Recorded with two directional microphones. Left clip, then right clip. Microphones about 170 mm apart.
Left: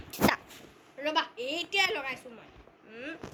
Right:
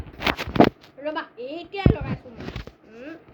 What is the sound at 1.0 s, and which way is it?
A child's voice, centre (ahead or behind).